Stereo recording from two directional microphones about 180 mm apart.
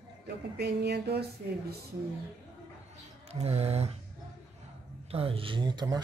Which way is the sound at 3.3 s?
35° right (ahead or behind).